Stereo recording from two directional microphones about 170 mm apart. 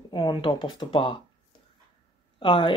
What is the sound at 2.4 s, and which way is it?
Speech, 30° left (ahead or behind).